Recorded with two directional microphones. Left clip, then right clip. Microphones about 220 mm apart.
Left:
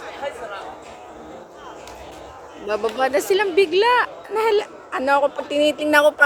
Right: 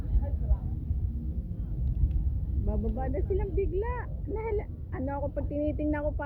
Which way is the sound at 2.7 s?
55° left (ahead or behind).